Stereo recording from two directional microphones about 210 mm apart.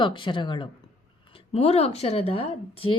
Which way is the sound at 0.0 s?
20° left (ahead or behind).